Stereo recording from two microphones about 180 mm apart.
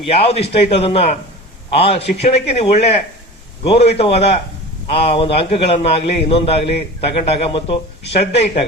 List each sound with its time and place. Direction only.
0.0 s a man's voice: 35° left (ahead or behind)